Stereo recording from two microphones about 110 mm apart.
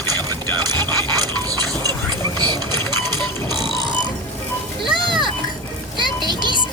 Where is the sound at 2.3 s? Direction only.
40° right (ahead or behind).